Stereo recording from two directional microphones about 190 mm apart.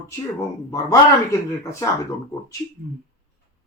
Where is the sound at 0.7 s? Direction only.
15° left (ahead or behind).